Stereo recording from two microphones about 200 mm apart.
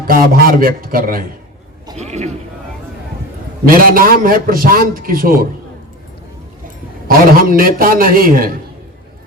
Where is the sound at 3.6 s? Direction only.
45° right (ahead or behind).